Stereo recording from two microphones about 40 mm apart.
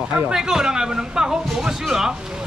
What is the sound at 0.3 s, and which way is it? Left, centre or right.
Speech, centre.